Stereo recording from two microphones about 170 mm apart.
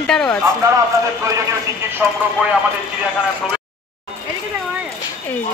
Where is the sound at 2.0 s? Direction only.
15° right (ahead or behind).